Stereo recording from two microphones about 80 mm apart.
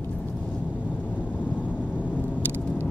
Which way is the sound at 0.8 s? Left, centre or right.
Left.